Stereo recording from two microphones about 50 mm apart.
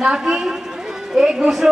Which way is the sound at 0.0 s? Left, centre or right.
Centre.